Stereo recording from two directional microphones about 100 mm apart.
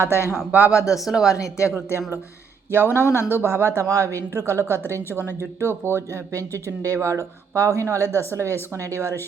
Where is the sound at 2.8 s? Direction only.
25° left (ahead or behind).